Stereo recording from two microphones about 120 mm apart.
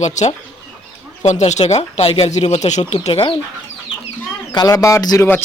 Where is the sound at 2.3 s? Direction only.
70° left (ahead or behind).